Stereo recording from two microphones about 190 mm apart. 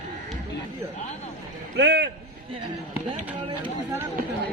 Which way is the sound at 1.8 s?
65° right (ahead or behind).